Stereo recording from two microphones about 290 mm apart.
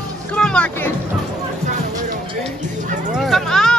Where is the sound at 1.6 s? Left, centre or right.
Right.